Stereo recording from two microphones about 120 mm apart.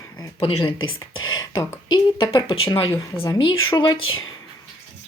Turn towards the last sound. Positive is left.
turn(degrees=40)  # may be behind; listen again after turning